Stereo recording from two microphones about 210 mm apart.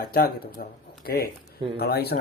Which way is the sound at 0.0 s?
45° left (ahead or behind).